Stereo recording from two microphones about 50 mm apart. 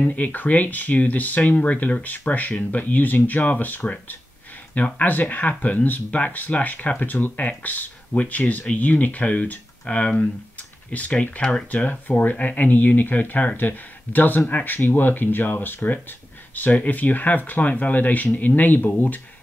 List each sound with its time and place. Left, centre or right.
0.0 s speech: left
4.9 s speech: left